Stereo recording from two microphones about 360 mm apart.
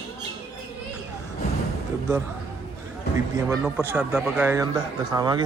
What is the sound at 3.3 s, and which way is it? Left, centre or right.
Speech, centre.